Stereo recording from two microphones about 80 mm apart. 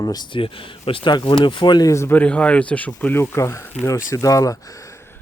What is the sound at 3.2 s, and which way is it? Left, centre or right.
Speech, left.